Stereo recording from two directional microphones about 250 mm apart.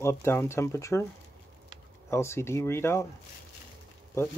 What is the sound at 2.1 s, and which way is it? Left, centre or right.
Speech, centre.